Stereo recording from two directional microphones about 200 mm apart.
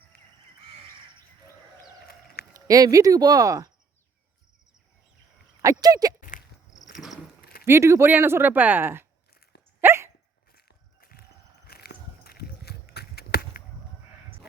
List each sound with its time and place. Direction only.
0.1 s crow: 55° left (ahead or behind)
2.5 s speech: 15° right (ahead or behind)
5.6 s speech: 20° right (ahead or behind)
7.6 s speech: 15° right (ahead or behind)
9.3 s dog: 50° left (ahead or behind)
9.8 s dog: 15° right (ahead or behind)
10.5 s walk: 45° left (ahead or behind)
11.7 s a sound: 50° left (ahead or behind)